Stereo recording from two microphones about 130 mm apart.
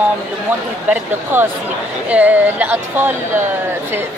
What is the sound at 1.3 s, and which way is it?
Speech, 15° right (ahead or behind).